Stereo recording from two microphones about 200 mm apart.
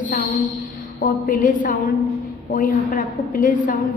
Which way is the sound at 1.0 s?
45° left (ahead or behind).